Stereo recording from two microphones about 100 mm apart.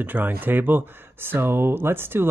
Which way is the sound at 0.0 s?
15° right (ahead or behind).